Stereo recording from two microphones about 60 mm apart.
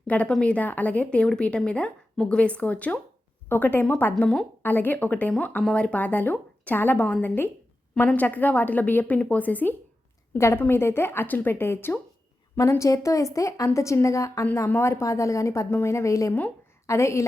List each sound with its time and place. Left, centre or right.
0.1 s a woman's voice: left
3.5 s a woman's voice: left
10.3 s a woman's voice: left
12.8 s speech: left
15.7 s a woman's voice: left